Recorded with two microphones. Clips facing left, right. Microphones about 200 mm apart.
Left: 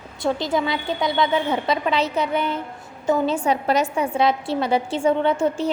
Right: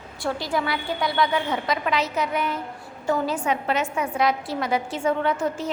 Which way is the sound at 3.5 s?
35° left (ahead or behind).